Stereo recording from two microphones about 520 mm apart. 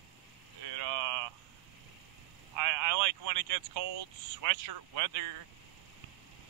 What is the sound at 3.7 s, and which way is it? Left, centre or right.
Speech, right.